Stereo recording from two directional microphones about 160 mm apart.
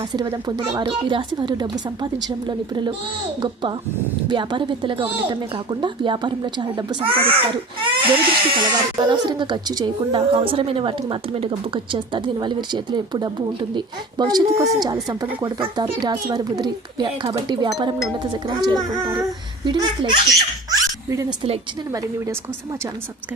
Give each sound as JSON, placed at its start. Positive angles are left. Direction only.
{"t": 0.0, "sound": "a child's voice", "side_deg": -25}
{"t": 20.7, "sound": "dog", "side_deg": -20}